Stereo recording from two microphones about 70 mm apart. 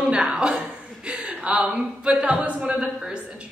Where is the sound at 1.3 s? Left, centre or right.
Centre.